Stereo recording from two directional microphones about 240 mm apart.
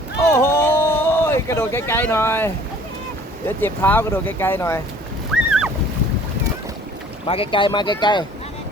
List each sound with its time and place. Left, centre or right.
0.3 s a sound: centre
3.6 s speech: centre
5.3 s boat: centre
7.3 s speech: left